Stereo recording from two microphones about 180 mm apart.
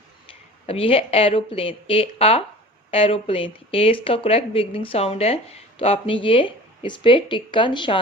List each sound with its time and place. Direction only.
0.7 s speech: 30° left (ahead or behind)